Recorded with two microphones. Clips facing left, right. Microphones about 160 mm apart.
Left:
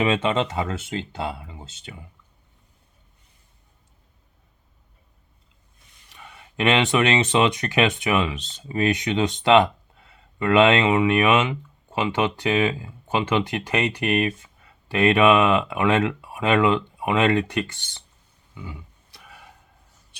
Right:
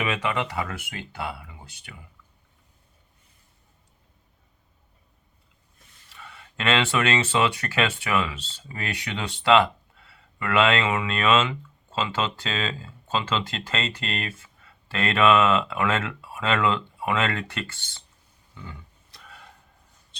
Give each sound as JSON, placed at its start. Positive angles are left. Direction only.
{"t": 0.0, "sound": "speech", "side_deg": 25}
{"t": 6.1, "sound": "speech", "side_deg": 15}
{"t": 18.5, "sound": "roaring cats", "side_deg": 10}